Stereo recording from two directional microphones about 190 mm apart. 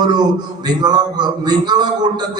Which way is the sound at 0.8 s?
20° right (ahead or behind).